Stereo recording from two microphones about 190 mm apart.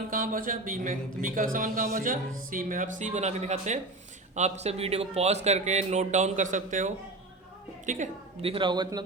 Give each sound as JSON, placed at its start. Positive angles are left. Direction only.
{"t": 0.1, "sound": "a man's voice", "side_deg": -45}